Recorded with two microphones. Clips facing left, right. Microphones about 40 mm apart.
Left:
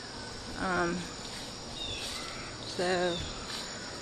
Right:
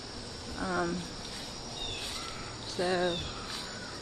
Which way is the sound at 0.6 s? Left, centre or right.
Left.